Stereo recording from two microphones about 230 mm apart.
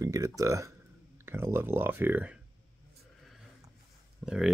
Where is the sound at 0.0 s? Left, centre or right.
Centre.